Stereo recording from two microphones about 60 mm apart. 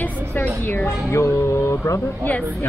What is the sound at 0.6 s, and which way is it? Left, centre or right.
Speech, left.